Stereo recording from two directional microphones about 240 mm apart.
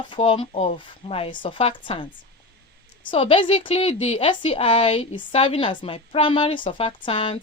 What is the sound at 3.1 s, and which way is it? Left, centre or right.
A woman's voice, left.